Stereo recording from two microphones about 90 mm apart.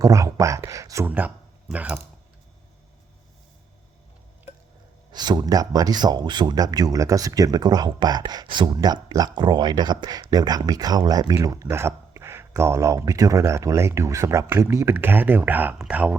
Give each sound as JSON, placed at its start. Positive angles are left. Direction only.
{"t": 0.0, "sound": "speech", "side_deg": -40}
{"t": 1.0, "sound": "speech", "side_deg": -20}
{"t": 5.1, "sound": "speech", "side_deg": -50}